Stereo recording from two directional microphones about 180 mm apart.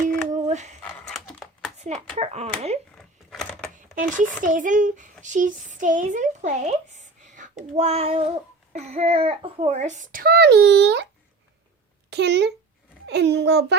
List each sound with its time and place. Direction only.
0.0 s a sound: 40° right (ahead or behind)
0.9 s computer keyboard: 5° left (ahead or behind)
2.1 s speech: 40° right (ahead or behind)
3.0 s a sound: 5° left (ahead or behind)
4.4 s a child's voice: 45° right (ahead or behind); by 11.0 s 70° right (ahead or behind)
12.1 s a child's voice: 70° right (ahead or behind)